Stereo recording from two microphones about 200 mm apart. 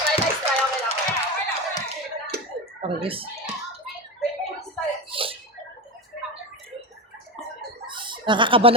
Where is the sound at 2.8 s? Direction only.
25° right (ahead or behind).